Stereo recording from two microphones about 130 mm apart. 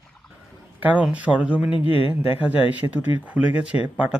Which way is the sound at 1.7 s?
45° left (ahead or behind).